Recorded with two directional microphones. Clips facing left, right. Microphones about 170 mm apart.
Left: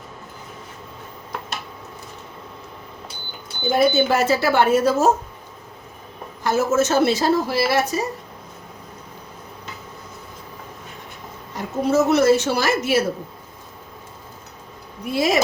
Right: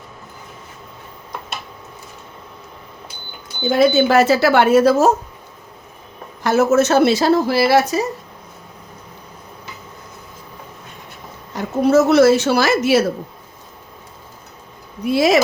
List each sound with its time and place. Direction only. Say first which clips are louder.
3.7 s speech: right 4 dB; 90° right; by 5.1 s 75° right (ahead or behind)
6.4 s a woman's voice: right 5 dB; 70° right (ahead or behind)
11.5 s a woman's voice: right 5 dB; 85° right
15.0 s speech: right 6 dB; 85° right